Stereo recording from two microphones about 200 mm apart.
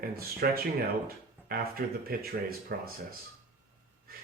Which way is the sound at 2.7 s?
50° right (ahead or behind).